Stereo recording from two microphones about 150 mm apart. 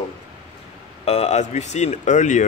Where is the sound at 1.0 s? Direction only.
50° left (ahead or behind).